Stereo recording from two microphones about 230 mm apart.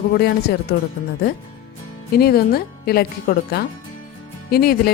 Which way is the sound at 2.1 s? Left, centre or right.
Left.